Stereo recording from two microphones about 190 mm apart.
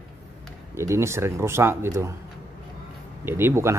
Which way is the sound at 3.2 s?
10° right (ahead or behind).